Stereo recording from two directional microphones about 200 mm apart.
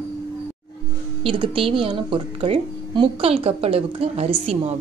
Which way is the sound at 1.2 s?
25° right (ahead or behind).